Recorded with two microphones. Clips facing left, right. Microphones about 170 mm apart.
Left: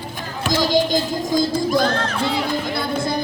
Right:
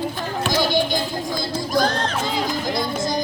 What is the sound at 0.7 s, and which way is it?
Music, 45° left (ahead or behind).